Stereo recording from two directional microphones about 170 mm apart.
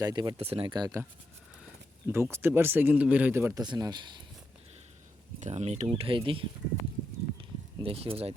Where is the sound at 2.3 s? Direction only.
15° right (ahead or behind).